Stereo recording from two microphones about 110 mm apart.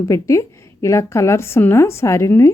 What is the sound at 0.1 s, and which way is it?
A woman's voice, 25° left (ahead or behind).